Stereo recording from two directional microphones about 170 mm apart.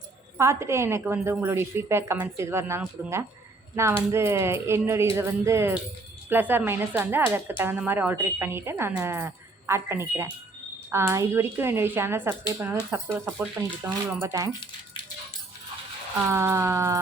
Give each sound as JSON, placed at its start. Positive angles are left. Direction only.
{"t": 0.3, "sound": "a woman's voice", "side_deg": -15}
{"t": 16.3, "sound": "a woman's voice", "side_deg": -15}